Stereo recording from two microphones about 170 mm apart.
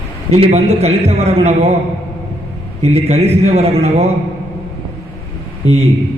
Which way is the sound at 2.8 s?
40° right (ahead or behind).